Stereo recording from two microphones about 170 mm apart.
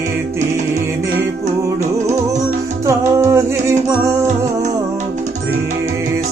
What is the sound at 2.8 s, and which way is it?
Music, 15° right (ahead or behind).